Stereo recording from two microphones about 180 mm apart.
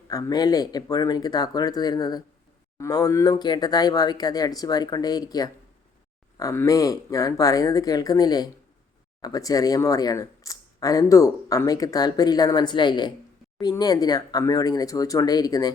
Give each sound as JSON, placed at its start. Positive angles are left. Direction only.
{"t": 0.1, "sound": "speech", "side_deg": 20}